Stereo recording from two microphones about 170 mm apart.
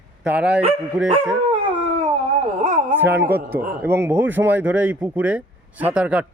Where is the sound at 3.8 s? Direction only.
15° right (ahead or behind).